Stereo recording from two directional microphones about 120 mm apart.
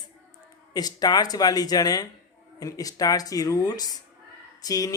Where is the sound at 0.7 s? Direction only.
35° left (ahead or behind).